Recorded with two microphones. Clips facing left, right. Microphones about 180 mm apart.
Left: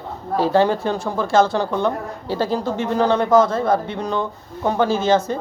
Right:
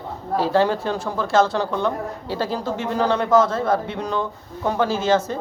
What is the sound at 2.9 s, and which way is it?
Speech, 25° left (ahead or behind).